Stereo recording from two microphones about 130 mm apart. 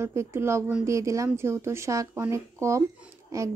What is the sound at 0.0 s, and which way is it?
A woman's voice, 20° right (ahead or behind).